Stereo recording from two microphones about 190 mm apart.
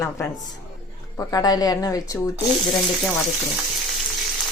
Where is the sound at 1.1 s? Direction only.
20° left (ahead or behind).